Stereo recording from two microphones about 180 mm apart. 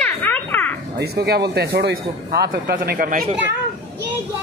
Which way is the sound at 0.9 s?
65° right (ahead or behind).